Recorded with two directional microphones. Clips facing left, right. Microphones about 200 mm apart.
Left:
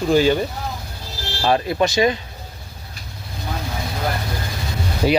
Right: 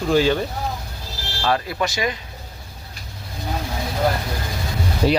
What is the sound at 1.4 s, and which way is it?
Speech, 25° left (ahead or behind).